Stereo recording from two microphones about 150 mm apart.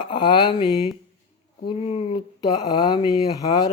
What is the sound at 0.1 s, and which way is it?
Mantra, 30° left (ahead or behind).